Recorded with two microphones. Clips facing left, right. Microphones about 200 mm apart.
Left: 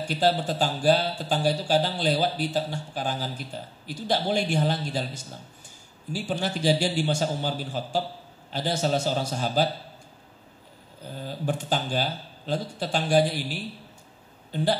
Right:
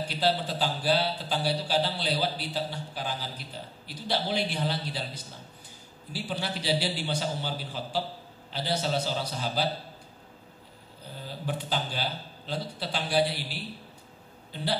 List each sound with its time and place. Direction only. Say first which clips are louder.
0.2 s speech: left 4 dB; 45° left (ahead or behind)
11.2 s speech: left 5 dB; 45° left (ahead or behind)